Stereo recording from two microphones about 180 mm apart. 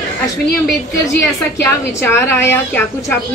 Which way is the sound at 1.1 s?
15° left (ahead or behind).